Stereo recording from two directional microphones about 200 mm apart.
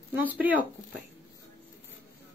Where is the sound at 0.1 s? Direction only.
10° right (ahead or behind).